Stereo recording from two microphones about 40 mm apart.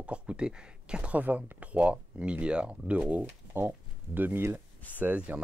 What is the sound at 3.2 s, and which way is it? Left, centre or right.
Speech, right.